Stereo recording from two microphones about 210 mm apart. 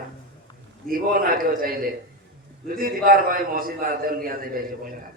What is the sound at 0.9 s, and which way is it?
A man's voice, 40° right (ahead or behind).